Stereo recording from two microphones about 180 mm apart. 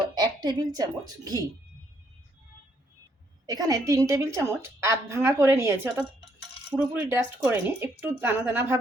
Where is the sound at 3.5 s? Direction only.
20° right (ahead or behind).